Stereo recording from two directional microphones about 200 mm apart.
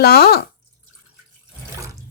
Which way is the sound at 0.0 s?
50° left (ahead or behind).